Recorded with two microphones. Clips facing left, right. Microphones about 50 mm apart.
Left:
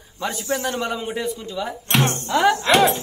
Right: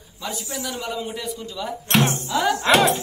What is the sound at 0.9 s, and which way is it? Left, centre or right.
A man's voice, left.